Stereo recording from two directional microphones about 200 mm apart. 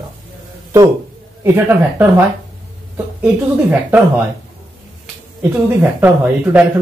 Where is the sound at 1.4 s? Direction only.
15° right (ahead or behind).